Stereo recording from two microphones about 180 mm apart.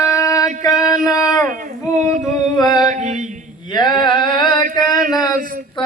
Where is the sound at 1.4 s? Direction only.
50° right (ahead or behind).